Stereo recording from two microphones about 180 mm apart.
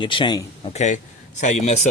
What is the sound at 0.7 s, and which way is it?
A man's voice, 40° left (ahead or behind).